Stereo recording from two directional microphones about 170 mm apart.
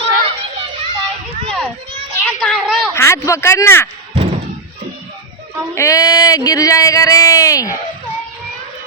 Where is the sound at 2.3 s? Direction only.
5° left (ahead or behind).